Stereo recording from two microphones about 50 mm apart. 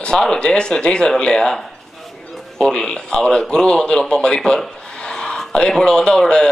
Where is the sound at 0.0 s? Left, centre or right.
Centre.